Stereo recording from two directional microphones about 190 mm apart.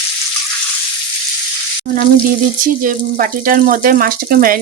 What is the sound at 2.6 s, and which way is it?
Speech, 45° right (ahead or behind).